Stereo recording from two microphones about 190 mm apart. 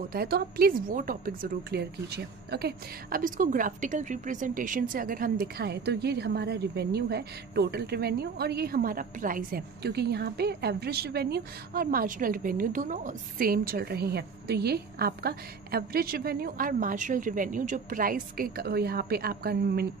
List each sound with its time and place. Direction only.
0.1 s a woman's voice: 55° right (ahead or behind)